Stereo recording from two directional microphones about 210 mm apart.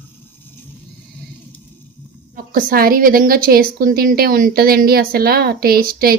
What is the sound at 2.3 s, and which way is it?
A woman's voice, 45° right (ahead or behind).